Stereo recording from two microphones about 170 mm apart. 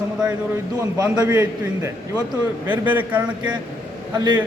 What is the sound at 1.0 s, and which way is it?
A man's voice, 20° right (ahead or behind).